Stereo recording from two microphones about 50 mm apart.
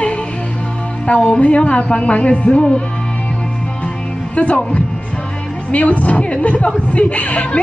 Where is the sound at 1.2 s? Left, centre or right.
Left.